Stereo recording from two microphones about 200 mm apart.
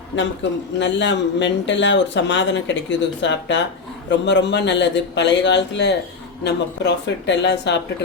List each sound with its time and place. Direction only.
0.8 s speech: 65° left (ahead or behind)